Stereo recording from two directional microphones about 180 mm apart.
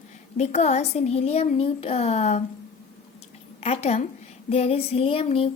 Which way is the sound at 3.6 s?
35° left (ahead or behind).